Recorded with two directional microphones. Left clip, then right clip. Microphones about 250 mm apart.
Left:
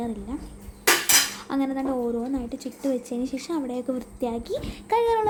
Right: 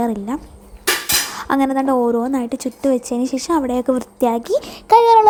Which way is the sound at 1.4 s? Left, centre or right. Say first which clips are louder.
Right 10 dB; right.